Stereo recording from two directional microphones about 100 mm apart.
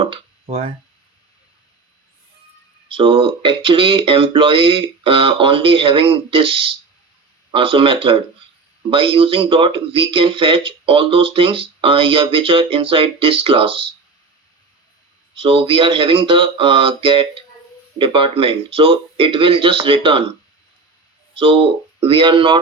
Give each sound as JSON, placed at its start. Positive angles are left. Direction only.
{"t": 0.0, "sound": "a sound", "side_deg": -75}
{"t": 2.9, "sound": "speech", "side_deg": -60}
{"t": 15.4, "sound": "speech", "side_deg": -60}
{"t": 21.3, "sound": "speech", "side_deg": -60}